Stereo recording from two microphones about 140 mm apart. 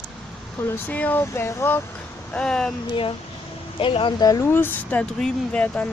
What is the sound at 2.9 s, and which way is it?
Speech, 40° left (ahead or behind).